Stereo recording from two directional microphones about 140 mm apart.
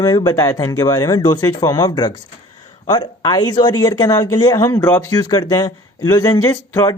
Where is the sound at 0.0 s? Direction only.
25° left (ahead or behind).